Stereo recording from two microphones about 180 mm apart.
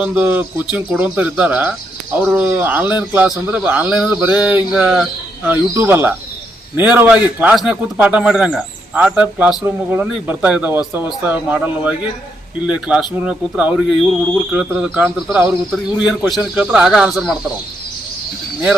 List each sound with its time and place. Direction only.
0.0 s a man's voice: 5° right (ahead or behind)